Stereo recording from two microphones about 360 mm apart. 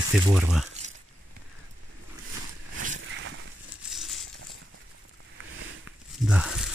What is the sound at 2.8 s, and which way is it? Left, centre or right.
Vehicle, right.